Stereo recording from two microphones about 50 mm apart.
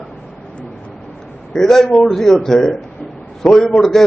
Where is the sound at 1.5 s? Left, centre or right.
Centre.